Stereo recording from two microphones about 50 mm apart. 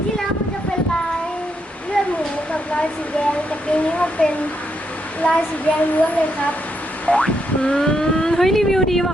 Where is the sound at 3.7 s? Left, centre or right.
Left.